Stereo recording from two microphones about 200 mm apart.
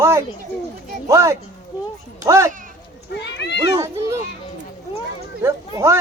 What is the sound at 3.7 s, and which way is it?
Speech, 15° right (ahead or behind).